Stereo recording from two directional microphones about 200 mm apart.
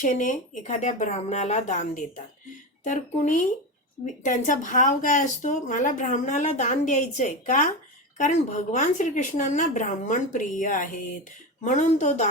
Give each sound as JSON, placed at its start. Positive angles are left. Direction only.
{"t": 0.0, "sound": "speech", "side_deg": 40}